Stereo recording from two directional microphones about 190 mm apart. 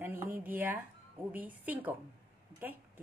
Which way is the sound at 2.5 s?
10° right (ahead or behind).